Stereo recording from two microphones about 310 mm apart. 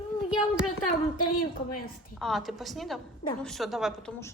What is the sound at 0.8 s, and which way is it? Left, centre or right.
Speech, left.